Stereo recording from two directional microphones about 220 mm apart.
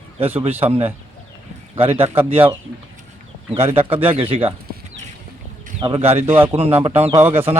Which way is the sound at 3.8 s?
25° right (ahead or behind).